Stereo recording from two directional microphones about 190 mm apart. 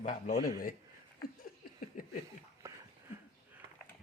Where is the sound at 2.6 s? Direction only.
15° right (ahead or behind).